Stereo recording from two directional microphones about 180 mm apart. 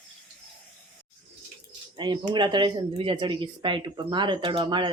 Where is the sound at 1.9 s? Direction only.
25° right (ahead or behind).